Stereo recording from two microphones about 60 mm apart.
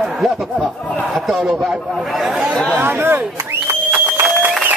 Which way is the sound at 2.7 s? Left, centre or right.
Right.